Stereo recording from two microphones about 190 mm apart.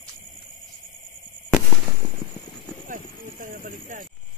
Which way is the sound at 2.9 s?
45° right (ahead or behind).